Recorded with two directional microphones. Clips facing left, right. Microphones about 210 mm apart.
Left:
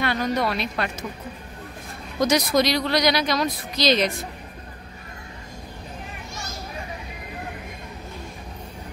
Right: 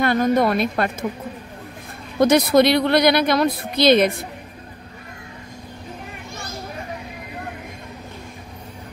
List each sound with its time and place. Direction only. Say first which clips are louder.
0.0 s speech: right 6 dB; 50° right (ahead or behind)
2.1 s speech: right 6 dB; 60° right (ahead or behind)